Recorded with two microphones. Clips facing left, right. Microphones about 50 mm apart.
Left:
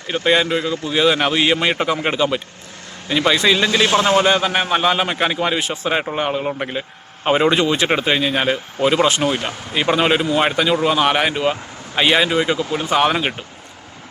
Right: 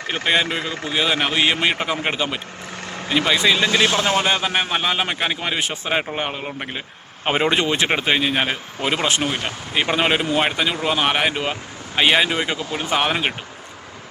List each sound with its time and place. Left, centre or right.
0.4 s a man's voice: centre
5.5 s speech: centre
7.3 s speech: centre